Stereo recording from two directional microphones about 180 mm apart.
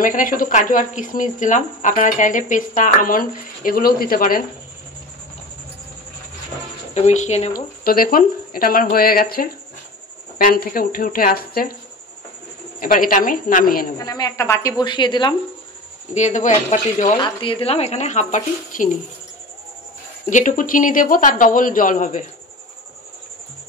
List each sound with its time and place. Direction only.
0.0 s speech: 50° left (ahead or behind)
6.9 s speech: 40° left (ahead or behind)
7.5 s speech: 55° left (ahead or behind)
12.8 s speech: 50° left (ahead or behind)
13.9 s a woman's voice: 20° left (ahead or behind)
16.2 s speech: 40° left (ahead or behind)
17.2 s speech: 30° left (ahead or behind)
20.2 s speech: 45° left (ahead or behind)